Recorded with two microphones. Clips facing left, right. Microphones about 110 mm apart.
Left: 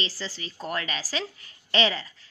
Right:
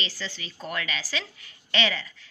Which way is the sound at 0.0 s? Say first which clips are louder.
Left 2 dB; 35° left (ahead or behind).